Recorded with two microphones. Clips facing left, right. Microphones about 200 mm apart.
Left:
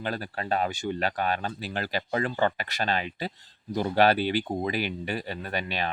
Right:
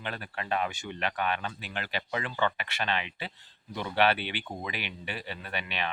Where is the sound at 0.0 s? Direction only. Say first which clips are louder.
Left 6 dB; 35° left (ahead or behind).